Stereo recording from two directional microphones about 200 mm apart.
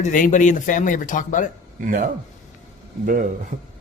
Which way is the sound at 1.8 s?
40° right (ahead or behind).